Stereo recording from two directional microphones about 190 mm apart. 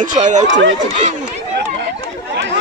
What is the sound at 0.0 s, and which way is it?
Speech, 40° right (ahead or behind).